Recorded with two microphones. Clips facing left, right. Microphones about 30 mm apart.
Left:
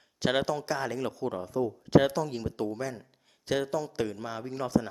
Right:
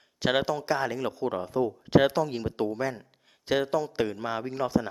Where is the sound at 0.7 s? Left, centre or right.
Centre.